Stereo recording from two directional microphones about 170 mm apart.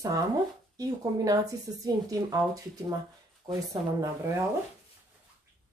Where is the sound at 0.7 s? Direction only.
20° right (ahead or behind).